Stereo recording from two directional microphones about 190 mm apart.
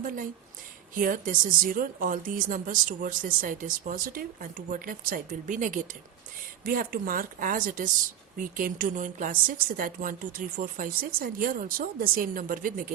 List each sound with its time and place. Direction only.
0.0 s speech: 45° right (ahead or behind)